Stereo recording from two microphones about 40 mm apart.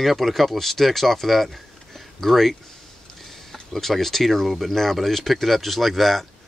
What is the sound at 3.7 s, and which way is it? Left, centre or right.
Speech, centre.